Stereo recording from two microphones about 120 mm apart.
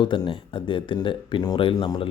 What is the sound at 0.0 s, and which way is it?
Speech, 40° left (ahead or behind).